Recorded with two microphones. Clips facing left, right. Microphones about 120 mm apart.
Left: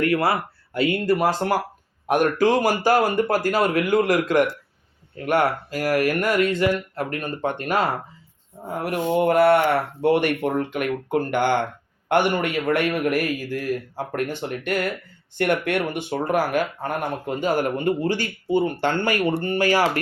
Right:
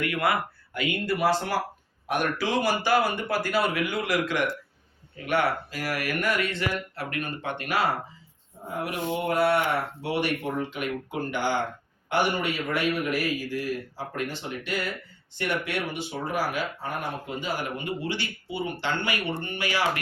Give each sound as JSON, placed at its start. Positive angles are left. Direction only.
{"t": 0.0, "sound": "a man's voice", "side_deg": 35}